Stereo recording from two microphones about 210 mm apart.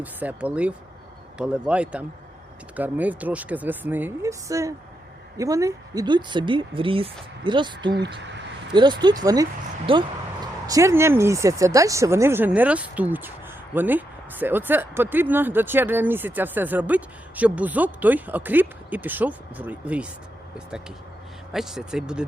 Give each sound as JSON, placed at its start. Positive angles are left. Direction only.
{"t": 0.0, "sound": "speech", "side_deg": -10}
{"t": 21.5, "sound": "speech", "side_deg": 0}